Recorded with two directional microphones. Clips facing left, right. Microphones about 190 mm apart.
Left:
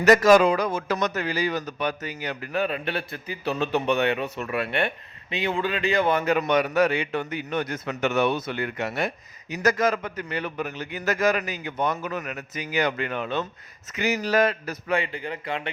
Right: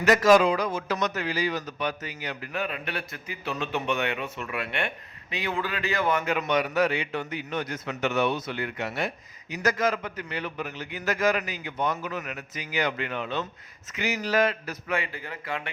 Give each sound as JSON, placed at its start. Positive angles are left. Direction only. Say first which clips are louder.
{"t": 0.0, "sound": "a man's voice", "louder": "left 3 dB", "side_deg": 45}
{"t": 2.6, "sound": "a man's voice", "louder": "left 6 dB", "side_deg": 35}
{"t": 5.3, "sound": "a man's voice", "louder": "left 4 dB", "side_deg": 25}